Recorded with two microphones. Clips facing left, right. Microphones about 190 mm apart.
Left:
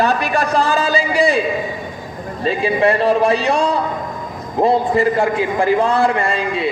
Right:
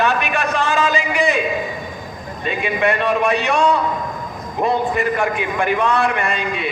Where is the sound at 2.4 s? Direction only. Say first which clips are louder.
Left 4 dB; 30° left (ahead or behind).